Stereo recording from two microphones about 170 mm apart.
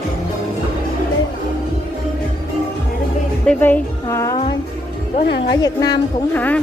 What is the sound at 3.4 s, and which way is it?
Speech, 10° left (ahead or behind).